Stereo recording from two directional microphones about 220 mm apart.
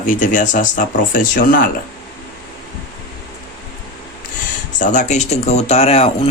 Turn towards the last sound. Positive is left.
turn(degrees=25)  # may be behind; listen again after turning